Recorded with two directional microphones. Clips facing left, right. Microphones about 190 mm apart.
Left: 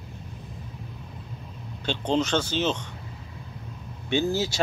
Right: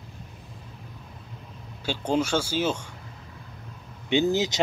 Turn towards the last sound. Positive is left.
turn(degrees=-20)  # may be behind; listen again after turning